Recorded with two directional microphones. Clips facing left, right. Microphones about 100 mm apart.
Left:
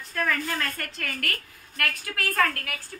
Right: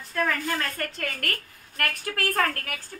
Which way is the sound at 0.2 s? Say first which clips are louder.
Right 1 dB; 20° right (ahead or behind).